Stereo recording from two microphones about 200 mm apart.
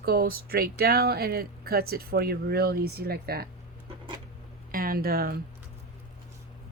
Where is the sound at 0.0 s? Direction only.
50° right (ahead or behind).